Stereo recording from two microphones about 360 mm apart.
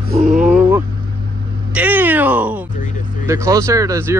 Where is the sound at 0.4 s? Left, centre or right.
Centre.